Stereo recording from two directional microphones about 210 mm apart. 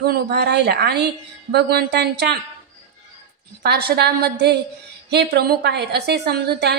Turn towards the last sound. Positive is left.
turn(degrees=-50)  # may be behind; listen again after turning